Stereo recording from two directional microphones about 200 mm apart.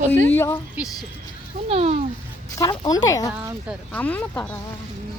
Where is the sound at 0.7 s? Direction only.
Centre (ahead or behind).